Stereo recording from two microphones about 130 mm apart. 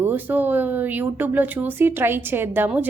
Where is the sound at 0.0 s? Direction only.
15° right (ahead or behind).